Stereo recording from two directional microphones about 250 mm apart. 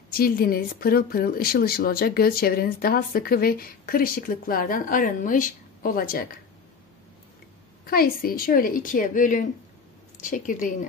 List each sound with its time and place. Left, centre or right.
0.1 s speech: left
7.8 s speech: left